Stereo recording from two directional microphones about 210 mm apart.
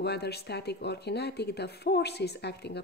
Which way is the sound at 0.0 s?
50° left (ahead or behind).